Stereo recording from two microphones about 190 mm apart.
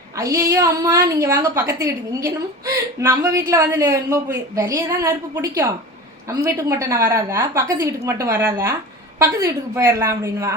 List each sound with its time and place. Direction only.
0.2 s a woman's voice: 15° right (ahead or behind)